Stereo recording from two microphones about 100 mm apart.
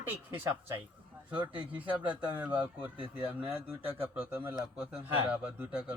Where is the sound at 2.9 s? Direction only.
60° right (ahead or behind).